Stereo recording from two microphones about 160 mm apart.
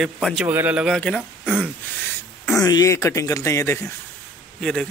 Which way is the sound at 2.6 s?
20° left (ahead or behind).